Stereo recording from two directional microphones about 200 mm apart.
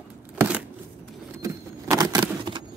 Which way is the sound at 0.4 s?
5° right (ahead or behind).